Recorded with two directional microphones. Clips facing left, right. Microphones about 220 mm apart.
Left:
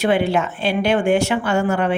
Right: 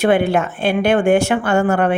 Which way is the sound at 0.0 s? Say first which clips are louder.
Right 3 dB; 50° right (ahead or behind).